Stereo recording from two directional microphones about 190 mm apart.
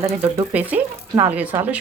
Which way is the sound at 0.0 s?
10° right (ahead or behind).